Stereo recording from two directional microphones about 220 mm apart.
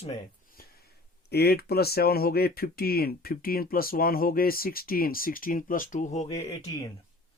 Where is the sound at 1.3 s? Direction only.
45° left (ahead or behind).